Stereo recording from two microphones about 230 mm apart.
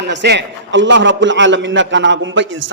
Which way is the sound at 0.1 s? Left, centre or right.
Right.